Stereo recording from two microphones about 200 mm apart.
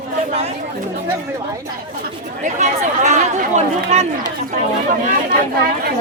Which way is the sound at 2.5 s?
35° right (ahead or behind).